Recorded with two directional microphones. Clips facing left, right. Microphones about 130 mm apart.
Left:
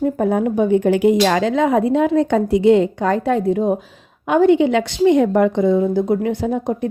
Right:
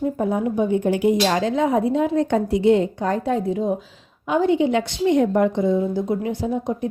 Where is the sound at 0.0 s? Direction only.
65° left (ahead or behind).